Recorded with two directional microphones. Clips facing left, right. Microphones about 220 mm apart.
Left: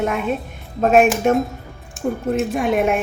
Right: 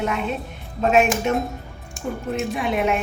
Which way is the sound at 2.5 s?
45° left (ahead or behind).